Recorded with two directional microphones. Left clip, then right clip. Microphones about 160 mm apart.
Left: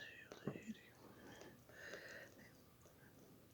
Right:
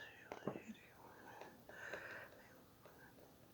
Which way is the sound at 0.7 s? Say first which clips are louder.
Left 2 dB; 50° left (ahead or behind).